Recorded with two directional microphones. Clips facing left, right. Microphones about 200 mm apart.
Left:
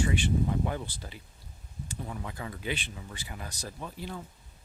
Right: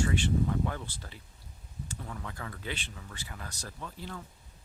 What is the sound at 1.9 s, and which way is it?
Speech, 15° left (ahead or behind).